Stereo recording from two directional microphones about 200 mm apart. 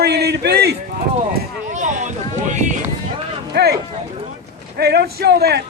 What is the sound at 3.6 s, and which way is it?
Speech, 55° right (ahead or behind).